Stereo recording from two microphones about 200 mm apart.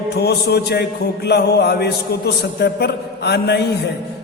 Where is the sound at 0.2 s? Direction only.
55° left (ahead or behind).